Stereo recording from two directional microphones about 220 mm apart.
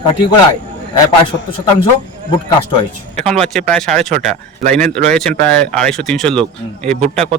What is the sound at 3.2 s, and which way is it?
Speech, centre (ahead or behind).